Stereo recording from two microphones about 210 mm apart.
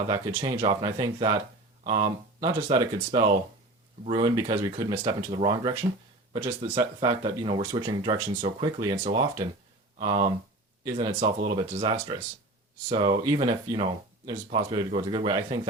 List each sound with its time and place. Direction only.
0.4 s speech: 20° right (ahead or behind)